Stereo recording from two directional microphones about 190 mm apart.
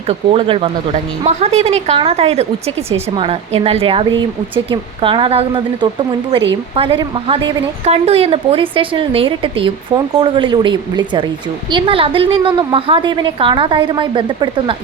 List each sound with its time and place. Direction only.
0.1 s a woman's voice: 30° right (ahead or behind)